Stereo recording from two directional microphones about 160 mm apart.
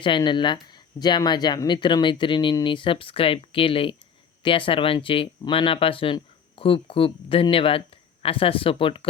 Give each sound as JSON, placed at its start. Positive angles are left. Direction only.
{"t": 0.0, "sound": "speech", "side_deg": 30}